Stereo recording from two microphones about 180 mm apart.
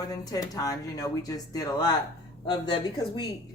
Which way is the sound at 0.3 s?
20° left (ahead or behind).